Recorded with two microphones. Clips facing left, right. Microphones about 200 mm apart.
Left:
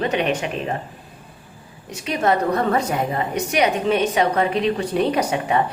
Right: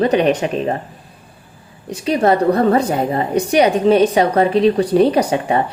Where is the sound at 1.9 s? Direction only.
35° right (ahead or behind).